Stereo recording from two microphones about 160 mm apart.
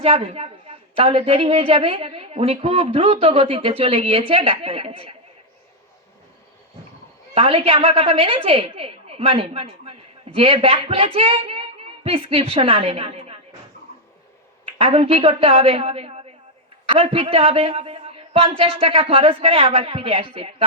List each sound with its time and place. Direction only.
0.0 s a woman's voice: 40° right (ahead or behind)
7.3 s a woman's voice: 35° right (ahead or behind)
14.6 s a woman's voice: 35° right (ahead or behind)